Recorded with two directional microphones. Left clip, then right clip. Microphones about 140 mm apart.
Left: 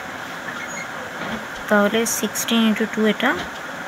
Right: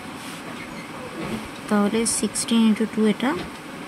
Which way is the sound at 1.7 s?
15° right (ahead or behind).